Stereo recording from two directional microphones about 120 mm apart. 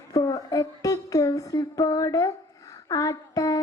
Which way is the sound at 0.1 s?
30° left (ahead or behind).